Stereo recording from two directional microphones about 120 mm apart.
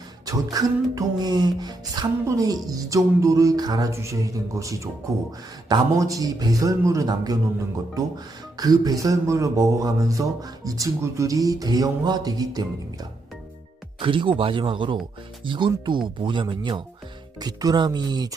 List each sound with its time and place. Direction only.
0.5 s speech: 30° right (ahead or behind)
2.6 s music: 30° right (ahead or behind)
8.5 s speech: 30° right (ahead or behind)
14.0 s speech: 45° right (ahead or behind)